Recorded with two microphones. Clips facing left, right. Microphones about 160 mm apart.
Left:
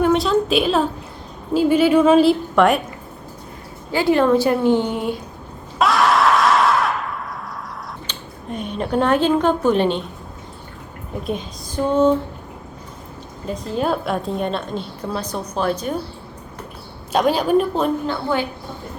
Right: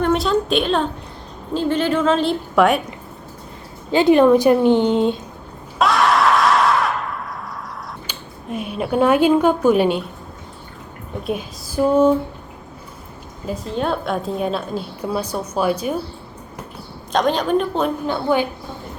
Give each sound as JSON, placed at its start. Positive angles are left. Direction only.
{"t": 0.0, "sound": "a woman's voice", "side_deg": 0}
{"t": 3.9, "sound": "a woman's voice", "side_deg": -20}
{"t": 5.8, "sound": "screaming", "side_deg": 0}
{"t": 8.0, "sound": "speech", "side_deg": -5}
{"t": 11.2, "sound": "a sound", "side_deg": -5}
{"t": 13.5, "sound": "a woman's voice", "side_deg": 0}
{"t": 17.1, "sound": "a woman's voice", "side_deg": 5}
{"t": 18.0, "sound": "a sound", "side_deg": -15}